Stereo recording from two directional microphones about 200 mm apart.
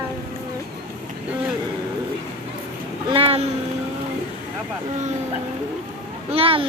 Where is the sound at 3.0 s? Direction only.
25° right (ahead or behind).